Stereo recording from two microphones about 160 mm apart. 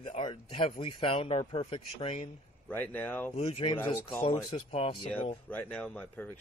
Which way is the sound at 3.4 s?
40° left (ahead or behind).